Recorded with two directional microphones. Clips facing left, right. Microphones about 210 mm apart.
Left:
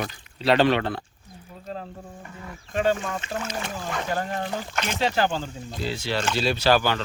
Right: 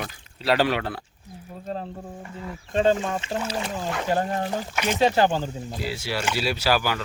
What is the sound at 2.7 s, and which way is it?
Speech, 25° right (ahead or behind).